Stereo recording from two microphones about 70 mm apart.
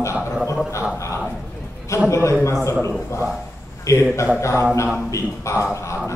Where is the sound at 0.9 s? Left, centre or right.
Left.